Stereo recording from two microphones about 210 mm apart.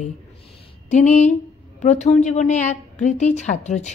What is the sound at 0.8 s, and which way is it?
Speech, 35° left (ahead or behind).